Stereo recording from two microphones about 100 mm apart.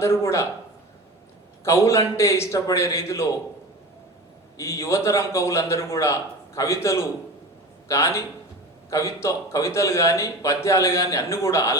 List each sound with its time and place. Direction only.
0.0 s speech: 30° left (ahead or behind)
1.6 s speech: 30° left (ahead or behind)
4.5 s speech: 30° left (ahead or behind)